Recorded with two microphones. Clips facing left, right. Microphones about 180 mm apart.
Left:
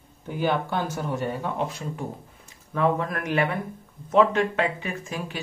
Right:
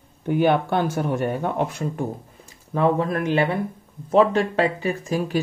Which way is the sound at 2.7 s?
30° right (ahead or behind).